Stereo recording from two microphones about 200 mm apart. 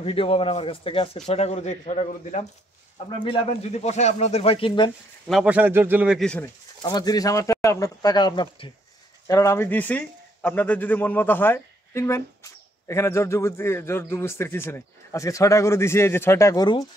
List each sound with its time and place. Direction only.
0.0 s a man's voice: 30° left (ahead or behind)
5.3 s a man's voice: 5° right (ahead or behind)
6.8 s a man's voice: 20° left (ahead or behind)